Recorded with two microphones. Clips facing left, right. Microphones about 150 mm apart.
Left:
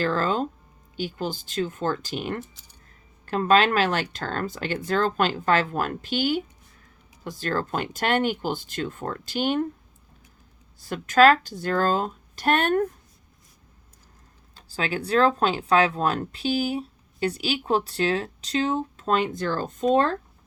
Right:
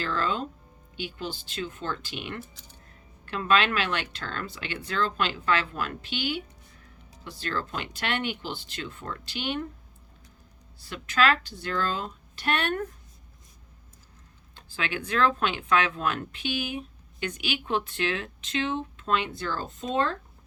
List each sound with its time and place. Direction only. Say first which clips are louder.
0.0 s speech: left 5 dB; 40° left (ahead or behind)
10.8 s speech: left 8 dB; 45° left (ahead or behind)
14.5 s speech: left 4 dB; 35° left (ahead or behind)